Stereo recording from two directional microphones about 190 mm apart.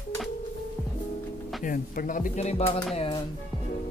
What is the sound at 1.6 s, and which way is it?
Speech, 45° left (ahead or behind).